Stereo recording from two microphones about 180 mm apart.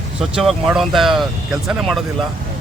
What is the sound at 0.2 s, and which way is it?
Speech, 5° right (ahead or behind).